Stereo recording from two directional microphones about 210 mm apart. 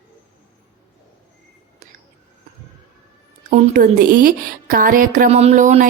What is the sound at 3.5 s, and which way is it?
A woman's voice, 35° right (ahead or behind).